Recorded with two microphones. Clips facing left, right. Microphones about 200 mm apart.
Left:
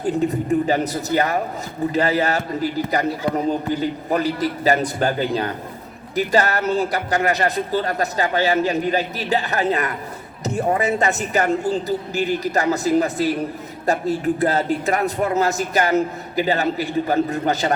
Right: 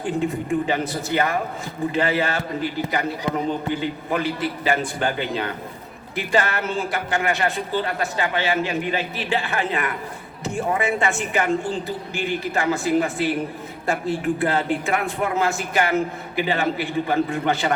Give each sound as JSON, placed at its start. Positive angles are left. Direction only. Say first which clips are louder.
{"t": 0.0, "sound": "a man's voice", "louder": "left 3 dB", "side_deg": 40}